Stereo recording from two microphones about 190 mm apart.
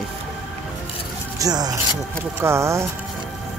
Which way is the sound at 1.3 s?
20° right (ahead or behind).